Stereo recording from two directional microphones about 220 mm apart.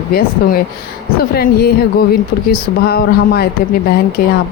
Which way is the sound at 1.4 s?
45° left (ahead or behind).